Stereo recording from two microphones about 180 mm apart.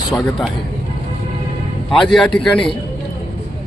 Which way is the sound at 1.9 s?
Centre (ahead or behind).